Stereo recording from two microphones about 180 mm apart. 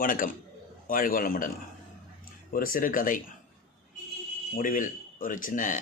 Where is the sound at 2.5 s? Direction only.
50° left (ahead or behind).